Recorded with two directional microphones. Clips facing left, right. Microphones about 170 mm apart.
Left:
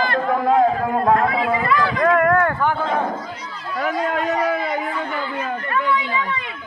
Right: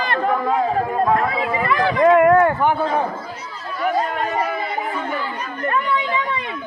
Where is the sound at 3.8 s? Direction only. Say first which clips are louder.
Right 1 dB; 85° left.